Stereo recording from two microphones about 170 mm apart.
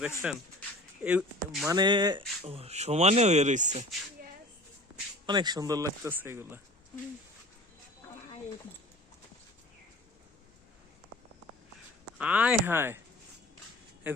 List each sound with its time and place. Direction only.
0.2 s speech: 5° right (ahead or behind)
1.6 s speech: 25° right (ahead or behind); by 4.3 s 45° right (ahead or behind)
5.2 s speech: 25° right (ahead or behind)
12.2 s speech: 5° right (ahead or behind)